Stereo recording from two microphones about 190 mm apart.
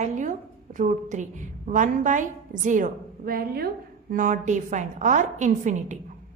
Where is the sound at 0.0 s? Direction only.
40° right (ahead or behind).